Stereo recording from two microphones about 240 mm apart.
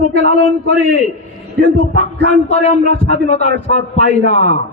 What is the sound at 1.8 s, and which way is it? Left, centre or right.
A man's voice, left.